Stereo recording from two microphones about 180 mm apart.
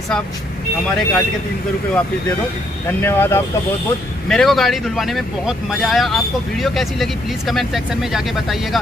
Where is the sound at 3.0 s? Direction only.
10° left (ahead or behind).